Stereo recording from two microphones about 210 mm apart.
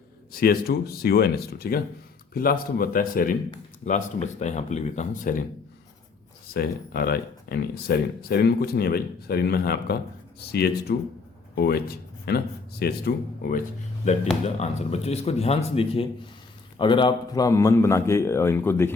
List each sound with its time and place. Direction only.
0.3 s speech: 45° left (ahead or behind)
6.5 s speech: 45° left (ahead or behind)
14.4 s a man's voice: 30° left (ahead or behind); by 18.9 s 10° left (ahead or behind)